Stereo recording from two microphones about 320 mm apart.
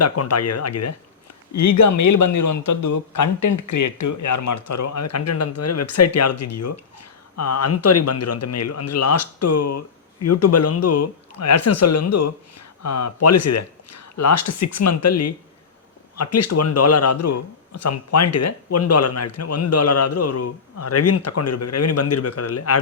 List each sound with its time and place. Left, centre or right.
0.0 s a man's voice: left